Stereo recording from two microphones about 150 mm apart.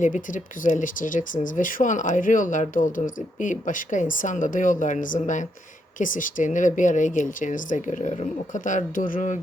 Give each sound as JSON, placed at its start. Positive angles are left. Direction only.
{"t": 0.0, "sound": "speech", "side_deg": 60}